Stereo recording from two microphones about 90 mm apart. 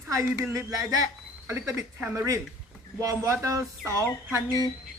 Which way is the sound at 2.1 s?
40° right (ahead or behind).